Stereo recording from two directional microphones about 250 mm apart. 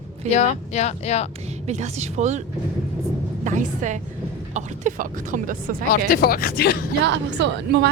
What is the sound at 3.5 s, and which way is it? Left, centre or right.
A woman's voice, right.